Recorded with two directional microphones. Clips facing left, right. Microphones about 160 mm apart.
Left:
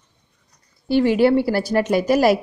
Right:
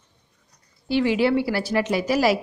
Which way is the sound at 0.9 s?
50° left (ahead or behind).